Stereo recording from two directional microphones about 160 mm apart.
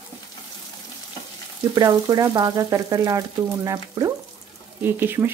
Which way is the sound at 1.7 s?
25° right (ahead or behind).